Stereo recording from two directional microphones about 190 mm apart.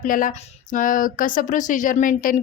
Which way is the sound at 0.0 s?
45° left (ahead or behind).